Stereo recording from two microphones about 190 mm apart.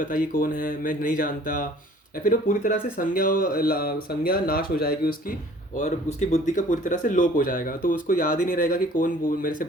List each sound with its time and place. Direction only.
0.0 s speech: 45° left (ahead or behind)